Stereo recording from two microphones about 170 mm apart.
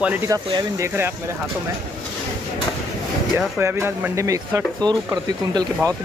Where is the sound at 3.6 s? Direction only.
15° right (ahead or behind).